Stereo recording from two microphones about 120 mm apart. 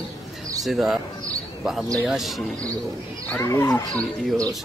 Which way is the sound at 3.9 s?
30° right (ahead or behind).